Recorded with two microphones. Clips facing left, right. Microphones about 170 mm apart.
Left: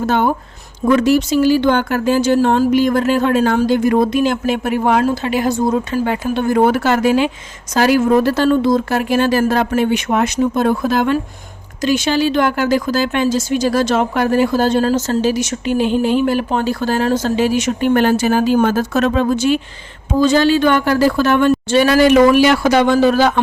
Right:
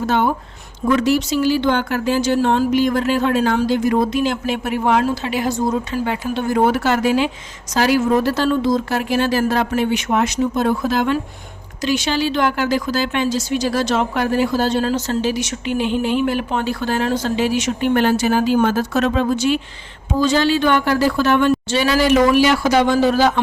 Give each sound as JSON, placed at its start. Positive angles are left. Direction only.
{"t": 0.9, "sound": "a woman's voice", "side_deg": 50}